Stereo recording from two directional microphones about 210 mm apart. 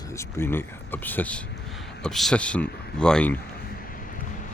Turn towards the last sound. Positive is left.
turn(degrees=5)  # may be behind; listen again after turning